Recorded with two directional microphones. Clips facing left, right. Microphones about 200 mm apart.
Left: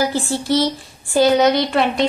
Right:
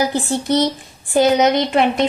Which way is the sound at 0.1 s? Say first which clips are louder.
Right 1 dB; 20° right (ahead or behind).